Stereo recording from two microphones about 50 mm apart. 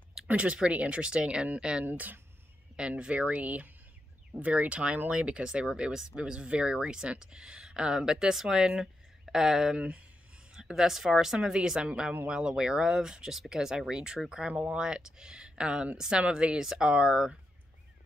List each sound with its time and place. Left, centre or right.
0.3 s speech: right
1.9 s speech: right
2.7 s speech: centre
9.8 s speech: right
10.5 s speech: centre